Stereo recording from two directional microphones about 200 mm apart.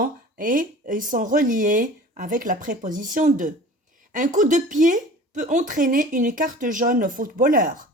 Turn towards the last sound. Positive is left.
turn(degrees=-45)  # may be behind; listen again after turning